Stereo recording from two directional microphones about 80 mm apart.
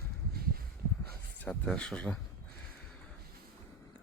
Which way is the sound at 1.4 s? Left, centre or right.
Centre.